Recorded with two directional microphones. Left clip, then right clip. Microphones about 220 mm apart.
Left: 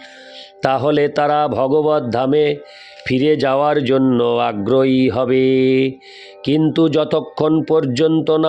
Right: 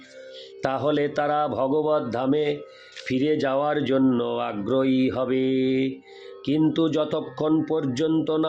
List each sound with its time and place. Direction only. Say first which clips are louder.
0.6 s speech: left 8 dB; 40° left (ahead or behind)